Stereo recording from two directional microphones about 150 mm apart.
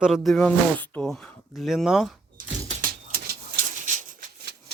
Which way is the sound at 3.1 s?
65° right (ahead or behind).